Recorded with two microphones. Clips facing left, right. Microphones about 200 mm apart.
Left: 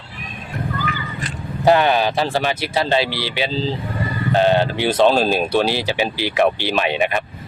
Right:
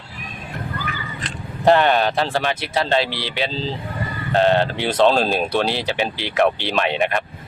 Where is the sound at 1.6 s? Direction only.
Centre (ahead or behind).